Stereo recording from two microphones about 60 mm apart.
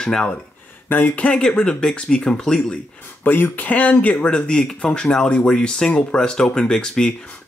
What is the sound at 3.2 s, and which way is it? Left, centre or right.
Speech, left.